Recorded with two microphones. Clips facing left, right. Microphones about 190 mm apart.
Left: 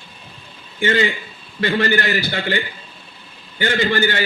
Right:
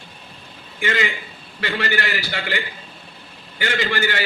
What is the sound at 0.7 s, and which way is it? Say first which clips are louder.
A man's voice: left 5 dB; 35° left (ahead or behind).